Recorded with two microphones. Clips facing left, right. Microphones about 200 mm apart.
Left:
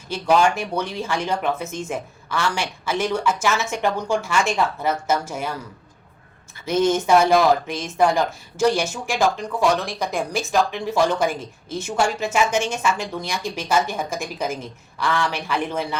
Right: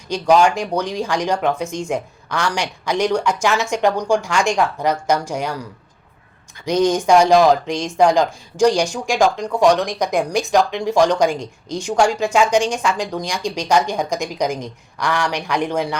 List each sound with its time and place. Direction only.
0.1 s a woman's voice: 15° right (ahead or behind)
6.7 s speech: 15° right (ahead or behind)